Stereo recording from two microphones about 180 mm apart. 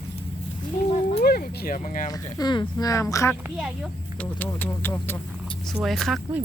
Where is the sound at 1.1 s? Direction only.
60° left (ahead or behind).